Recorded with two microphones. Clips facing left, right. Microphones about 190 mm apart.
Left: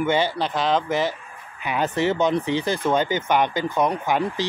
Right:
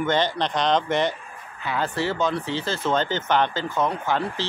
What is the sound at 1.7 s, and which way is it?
Speech, 20° left (ahead or behind).